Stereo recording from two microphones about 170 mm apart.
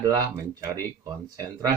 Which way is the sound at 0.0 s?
20° right (ahead or behind).